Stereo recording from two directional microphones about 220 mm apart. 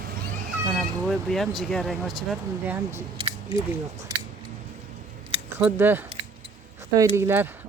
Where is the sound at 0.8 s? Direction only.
Centre (ahead or behind).